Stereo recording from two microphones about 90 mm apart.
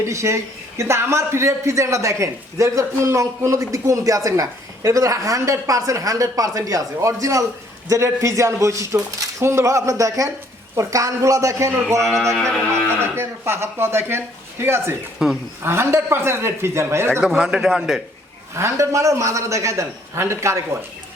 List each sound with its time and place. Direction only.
0.0 s a man's voice: 35° right (ahead or behind)
12.0 s a man's voice: 5° left (ahead or behind)
12.7 s speech: 30° right (ahead or behind)
15.2 s speech: 5° right (ahead or behind)
15.6 s speech: 30° right (ahead or behind)
17.2 s a man's voice: 5° right (ahead or behind)
18.5 s a man's voice: 30° right (ahead or behind)